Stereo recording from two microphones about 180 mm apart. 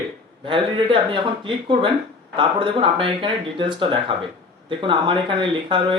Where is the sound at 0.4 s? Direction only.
30° right (ahead or behind).